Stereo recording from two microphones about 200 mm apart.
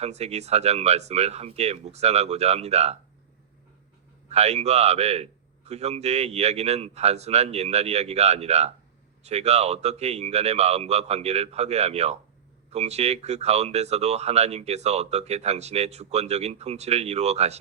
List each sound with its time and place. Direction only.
0.0 s speech: 30° right (ahead or behind)
4.3 s speech: 30° right (ahead or behind)